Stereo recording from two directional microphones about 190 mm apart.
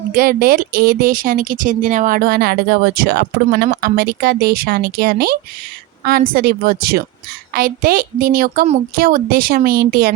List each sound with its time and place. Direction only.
0.1 s speech: 50° right (ahead or behind)